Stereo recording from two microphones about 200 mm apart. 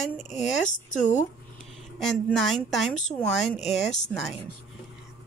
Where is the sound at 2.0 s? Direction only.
Centre (ahead or behind).